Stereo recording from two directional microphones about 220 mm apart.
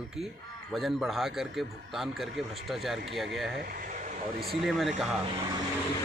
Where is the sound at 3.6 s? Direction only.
40° right (ahead or behind).